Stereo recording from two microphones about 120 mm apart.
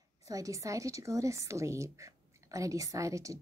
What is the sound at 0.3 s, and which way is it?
Speech, 25° right (ahead or behind).